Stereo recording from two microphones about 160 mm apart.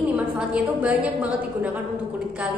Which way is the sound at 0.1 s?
5° right (ahead or behind).